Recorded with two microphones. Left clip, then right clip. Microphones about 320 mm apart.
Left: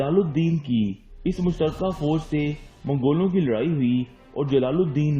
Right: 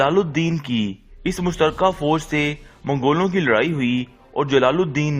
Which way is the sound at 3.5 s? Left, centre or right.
Centre.